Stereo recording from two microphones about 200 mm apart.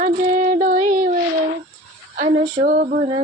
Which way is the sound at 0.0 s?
40° right (ahead or behind).